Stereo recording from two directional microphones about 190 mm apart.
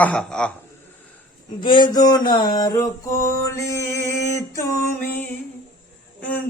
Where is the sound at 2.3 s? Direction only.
20° left (ahead or behind).